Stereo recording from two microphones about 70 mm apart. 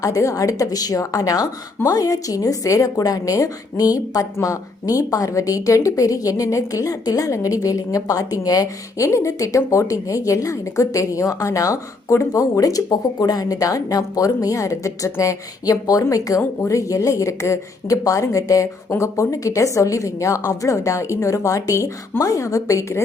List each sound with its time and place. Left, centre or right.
0.0 s a woman's voice: left